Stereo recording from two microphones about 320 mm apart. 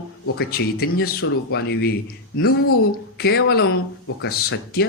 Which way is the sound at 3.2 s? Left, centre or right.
Left.